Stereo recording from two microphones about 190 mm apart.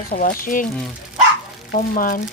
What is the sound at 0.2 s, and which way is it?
Speech, 50° left (ahead or behind).